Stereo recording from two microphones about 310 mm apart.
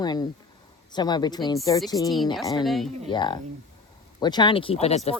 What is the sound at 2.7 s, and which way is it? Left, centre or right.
Speech, centre.